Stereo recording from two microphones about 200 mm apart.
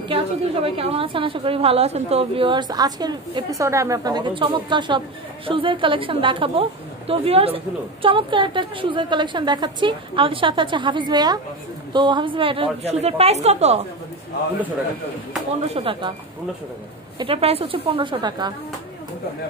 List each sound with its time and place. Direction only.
0.1 s a woman's voice: 30° right (ahead or behind)
15.7 s a woman's voice: 25° right (ahead or behind)
17.2 s a woman's voice: 30° right (ahead or behind)